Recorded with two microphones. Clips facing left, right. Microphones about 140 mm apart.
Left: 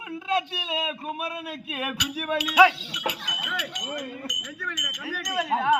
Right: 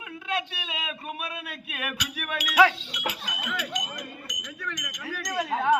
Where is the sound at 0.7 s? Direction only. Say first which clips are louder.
Left 7 dB; 30° left (ahead or behind).